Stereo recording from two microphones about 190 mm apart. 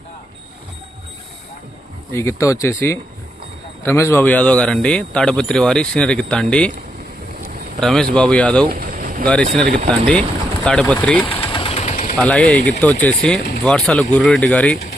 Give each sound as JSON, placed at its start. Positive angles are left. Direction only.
{"t": 2.1, "sound": "speech", "side_deg": 15}
{"t": 7.8, "sound": "speech", "side_deg": 0}
{"t": 8.7, "sound": "vehicle", "side_deg": -45}
{"t": 9.2, "sound": "speech", "side_deg": 5}
{"t": 11.3, "sound": "engine", "side_deg": 30}
{"t": 12.1, "sound": "speech", "side_deg": 5}